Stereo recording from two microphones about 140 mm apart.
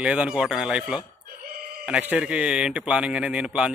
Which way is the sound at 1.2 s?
90° right.